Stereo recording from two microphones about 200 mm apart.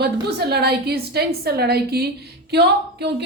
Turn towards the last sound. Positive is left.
turn(degrees=-55)  # may be behind; listen again after turning